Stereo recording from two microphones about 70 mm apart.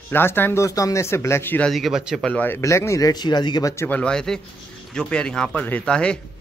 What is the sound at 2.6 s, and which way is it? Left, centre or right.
Speech, left.